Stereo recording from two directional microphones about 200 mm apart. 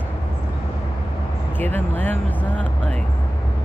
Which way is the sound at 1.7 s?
10° left (ahead or behind).